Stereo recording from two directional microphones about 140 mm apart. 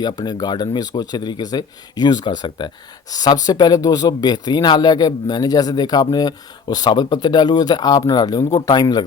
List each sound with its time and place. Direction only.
0.0 s speech: 30° left (ahead or behind)